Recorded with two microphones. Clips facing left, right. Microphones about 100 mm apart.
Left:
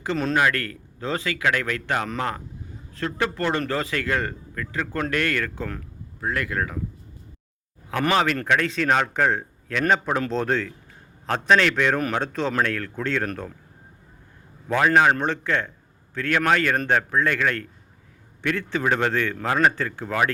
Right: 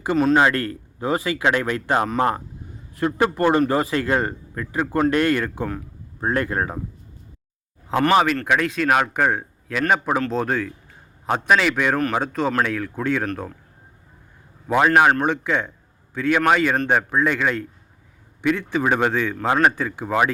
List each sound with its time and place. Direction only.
0.3 s speech: 25° right (ahead or behind)
6.1 s speech: 35° right (ahead or behind)
8.1 s a man's voice: 10° right (ahead or behind)
14.8 s a man's voice: 15° right (ahead or behind)